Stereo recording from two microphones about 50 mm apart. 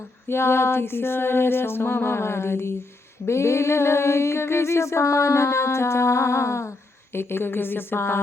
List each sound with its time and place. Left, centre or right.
0.3 s music: left
3.2 s a sound: left
6.7 s speech: left